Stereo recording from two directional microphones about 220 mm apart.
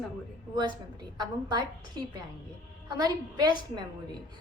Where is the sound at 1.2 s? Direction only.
20° right (ahead or behind).